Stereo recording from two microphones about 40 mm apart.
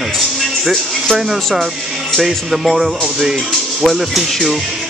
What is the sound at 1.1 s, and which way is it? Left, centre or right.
Speech, centre.